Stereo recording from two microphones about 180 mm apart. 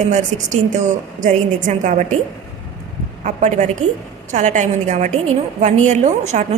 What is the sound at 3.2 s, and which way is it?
A woman's voice, 45° right (ahead or behind).